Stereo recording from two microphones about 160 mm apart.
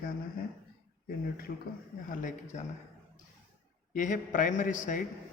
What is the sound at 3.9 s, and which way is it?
A man's voice, 55° left (ahead or behind).